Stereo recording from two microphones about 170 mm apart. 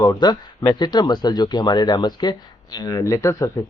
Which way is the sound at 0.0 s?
25° left (ahead or behind).